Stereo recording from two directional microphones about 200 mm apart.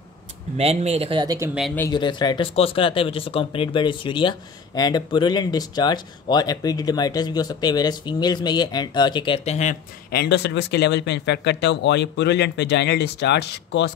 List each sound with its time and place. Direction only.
0.6 s speech: 30° right (ahead or behind)
1.8 s speech: 20° left (ahead or behind)
10.1 s speech: 60° left (ahead or behind)